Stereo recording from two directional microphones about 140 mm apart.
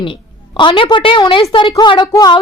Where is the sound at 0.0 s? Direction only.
35° left (ahead or behind).